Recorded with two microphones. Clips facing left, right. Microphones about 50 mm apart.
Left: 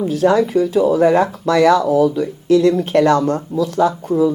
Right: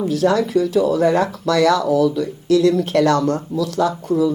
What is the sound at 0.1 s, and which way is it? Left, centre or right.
Speech, left.